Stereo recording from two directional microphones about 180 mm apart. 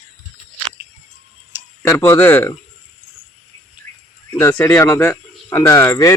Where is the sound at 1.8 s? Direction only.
10° left (ahead or behind).